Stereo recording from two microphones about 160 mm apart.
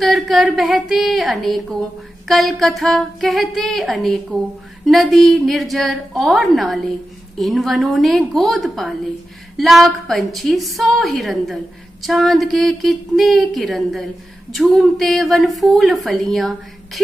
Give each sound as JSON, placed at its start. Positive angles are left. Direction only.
{"t": 0.0, "sound": "a woman's voice", "side_deg": 0}